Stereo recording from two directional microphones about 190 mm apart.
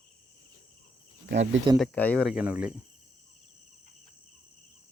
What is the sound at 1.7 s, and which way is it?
Speech, 5° left (ahead or behind).